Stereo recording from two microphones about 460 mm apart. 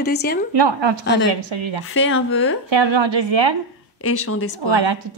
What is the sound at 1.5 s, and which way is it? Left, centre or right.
Speech, right.